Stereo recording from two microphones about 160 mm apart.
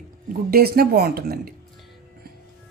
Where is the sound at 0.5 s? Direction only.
70° right (ahead or behind).